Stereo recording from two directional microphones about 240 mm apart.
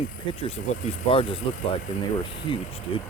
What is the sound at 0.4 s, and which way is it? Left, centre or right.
Speech, left.